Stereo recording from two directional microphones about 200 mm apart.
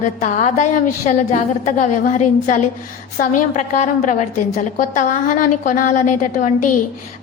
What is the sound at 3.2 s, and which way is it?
A woman's voice, 35° left (ahead or behind).